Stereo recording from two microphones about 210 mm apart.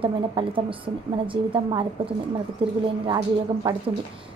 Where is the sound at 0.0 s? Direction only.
25° right (ahead or behind).